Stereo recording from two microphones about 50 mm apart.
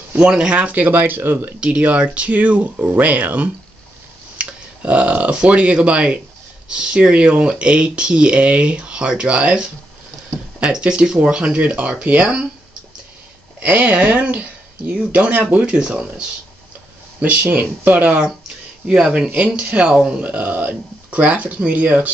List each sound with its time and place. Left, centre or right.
0.3 s speech: centre
0.6 s speech: right
1.6 s speech: right
13.6 s speech: right
15.6 s speech: centre
17.2 s speech: right
18.9 s speech: centre
19.2 s speech: right
20.2 s speech: right